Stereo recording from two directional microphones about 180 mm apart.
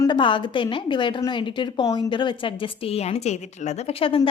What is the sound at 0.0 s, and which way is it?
A woman's voice, 25° left (ahead or behind).